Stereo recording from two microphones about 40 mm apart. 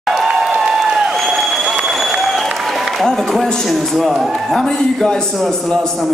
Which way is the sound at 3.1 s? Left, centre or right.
Centre.